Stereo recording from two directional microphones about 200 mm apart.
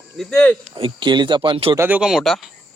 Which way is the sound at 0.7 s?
25° right (ahead or behind).